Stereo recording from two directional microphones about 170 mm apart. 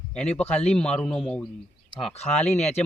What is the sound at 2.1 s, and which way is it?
Speech, 40° left (ahead or behind).